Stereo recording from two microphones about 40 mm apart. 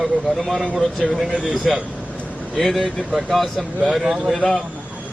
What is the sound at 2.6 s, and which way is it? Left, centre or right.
A man's voice, centre.